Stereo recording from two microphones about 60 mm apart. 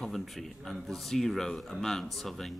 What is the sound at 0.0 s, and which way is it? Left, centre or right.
Speech, centre.